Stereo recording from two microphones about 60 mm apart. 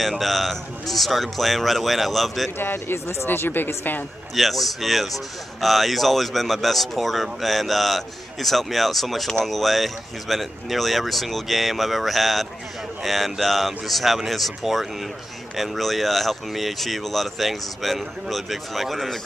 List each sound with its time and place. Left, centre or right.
0.0 s speech: centre
2.6 s speech: left
4.4 s speech: centre